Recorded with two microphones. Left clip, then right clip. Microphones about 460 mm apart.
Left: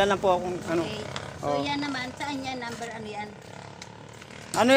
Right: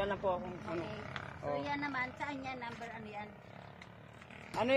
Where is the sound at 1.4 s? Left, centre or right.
Right.